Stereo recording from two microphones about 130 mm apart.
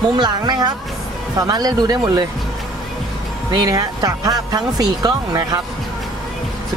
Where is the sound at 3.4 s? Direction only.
30° right (ahead or behind).